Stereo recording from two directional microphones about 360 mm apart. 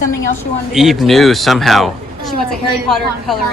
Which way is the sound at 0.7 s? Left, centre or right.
Centre.